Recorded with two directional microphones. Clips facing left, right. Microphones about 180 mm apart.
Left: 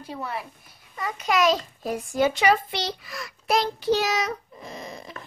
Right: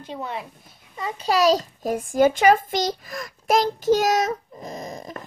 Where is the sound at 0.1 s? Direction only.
20° right (ahead or behind).